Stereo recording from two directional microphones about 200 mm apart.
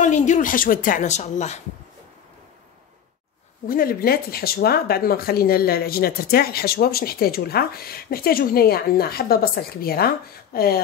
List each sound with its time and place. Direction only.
0.0 s a woman's voice: 35° left (ahead or behind)
3.6 s speech: 45° left (ahead or behind)